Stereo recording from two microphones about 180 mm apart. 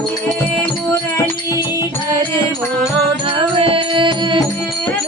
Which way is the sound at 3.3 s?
30° right (ahead or behind).